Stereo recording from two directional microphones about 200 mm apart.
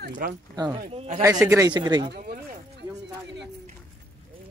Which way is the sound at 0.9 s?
30° right (ahead or behind).